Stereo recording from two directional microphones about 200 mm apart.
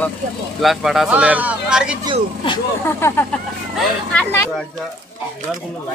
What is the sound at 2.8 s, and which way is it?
Speech, 10° left (ahead or behind).